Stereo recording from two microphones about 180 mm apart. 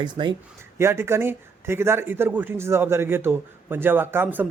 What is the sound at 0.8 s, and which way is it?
Speech, 15° right (ahead or behind).